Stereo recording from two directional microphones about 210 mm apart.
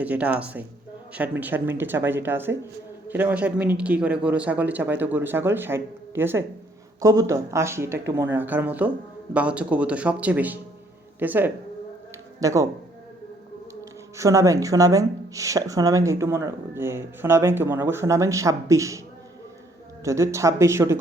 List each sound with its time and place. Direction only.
0.0 s a woman's voice: 5° right (ahead or behind)
14.2 s a woman's voice: 15° right (ahead or behind)
20.1 s a woman's voice: 15° right (ahead or behind)